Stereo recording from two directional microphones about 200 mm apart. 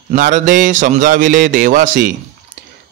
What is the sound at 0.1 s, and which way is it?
A man's voice, 40° right (ahead or behind).